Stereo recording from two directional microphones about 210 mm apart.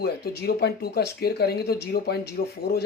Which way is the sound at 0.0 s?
50° left (ahead or behind).